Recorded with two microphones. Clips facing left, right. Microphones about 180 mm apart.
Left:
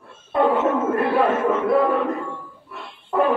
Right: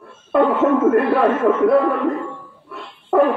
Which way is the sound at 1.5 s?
70° right (ahead or behind).